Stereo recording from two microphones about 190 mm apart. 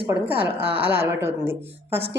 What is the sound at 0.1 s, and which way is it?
A woman's voice, 10° right (ahead or behind).